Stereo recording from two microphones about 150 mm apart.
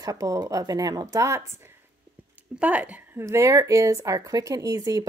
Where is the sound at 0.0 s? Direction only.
25° right (ahead or behind).